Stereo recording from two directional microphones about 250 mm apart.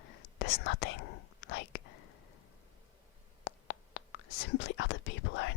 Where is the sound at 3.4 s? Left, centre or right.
Left.